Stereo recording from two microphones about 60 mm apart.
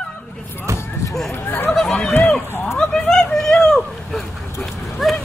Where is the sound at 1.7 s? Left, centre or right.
Centre.